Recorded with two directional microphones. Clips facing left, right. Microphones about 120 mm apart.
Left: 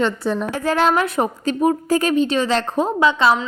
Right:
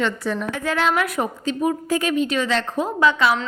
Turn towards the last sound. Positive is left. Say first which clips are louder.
# left 2 dB
turn(degrees=20)  # may be behind; listen again after turning